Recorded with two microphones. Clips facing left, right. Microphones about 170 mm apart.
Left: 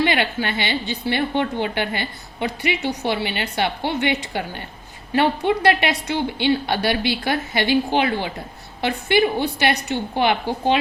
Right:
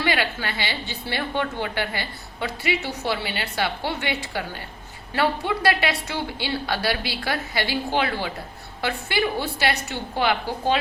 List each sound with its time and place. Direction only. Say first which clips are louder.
0.0 s a woman's voice: left 4 dB; 20° left (ahead or behind)